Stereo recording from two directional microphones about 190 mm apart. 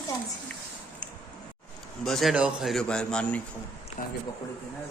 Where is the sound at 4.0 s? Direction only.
45° left (ahead or behind).